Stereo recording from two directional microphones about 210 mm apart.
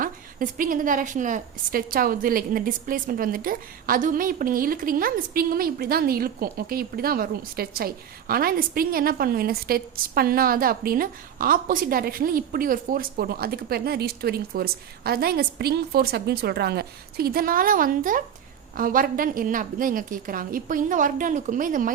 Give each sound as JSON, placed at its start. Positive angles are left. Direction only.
{"t": 0.0, "sound": "a woman's voice", "side_deg": -40}